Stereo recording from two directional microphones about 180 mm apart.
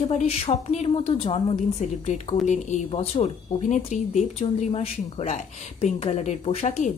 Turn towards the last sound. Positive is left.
turn(degrees=40)  # may be behind; listen again after turning